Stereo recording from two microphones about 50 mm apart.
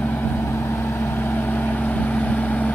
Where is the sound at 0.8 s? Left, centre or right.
Left.